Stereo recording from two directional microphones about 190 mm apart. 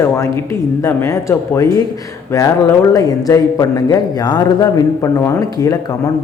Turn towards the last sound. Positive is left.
turn(degrees=20)  # may be behind; listen again after turning